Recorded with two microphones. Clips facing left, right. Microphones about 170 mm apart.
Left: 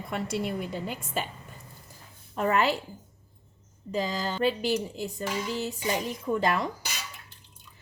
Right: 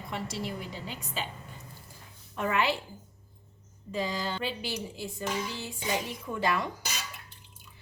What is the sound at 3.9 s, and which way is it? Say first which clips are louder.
Speech: left 3 dB; 45° left (ahead or behind).